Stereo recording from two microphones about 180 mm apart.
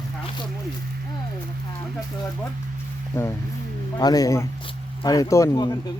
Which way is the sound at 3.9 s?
20° left (ahead or behind).